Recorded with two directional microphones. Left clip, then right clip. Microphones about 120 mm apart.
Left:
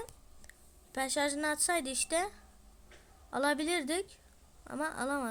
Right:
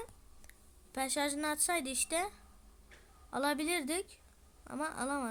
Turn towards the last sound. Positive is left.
turn(degrees=0)  # may be behind; listen again after turning